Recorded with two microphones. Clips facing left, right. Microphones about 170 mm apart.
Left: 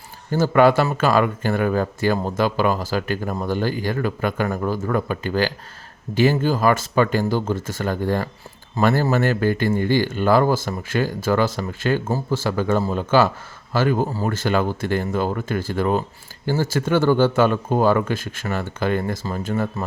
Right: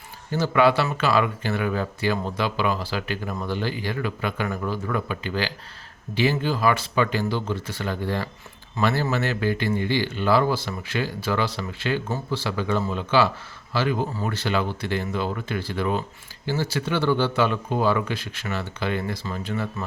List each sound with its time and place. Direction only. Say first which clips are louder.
0.3 s speech: left 4 dB; 45° left (ahead or behind)